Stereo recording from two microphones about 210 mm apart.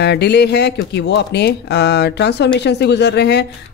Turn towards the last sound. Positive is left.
turn(degrees=50)  # may be behind; listen again after turning